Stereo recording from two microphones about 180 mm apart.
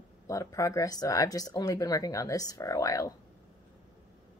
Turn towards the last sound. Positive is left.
turn(degrees=20)  # may be behind; listen again after turning